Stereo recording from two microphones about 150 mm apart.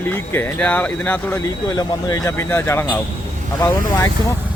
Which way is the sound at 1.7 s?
25° left (ahead or behind).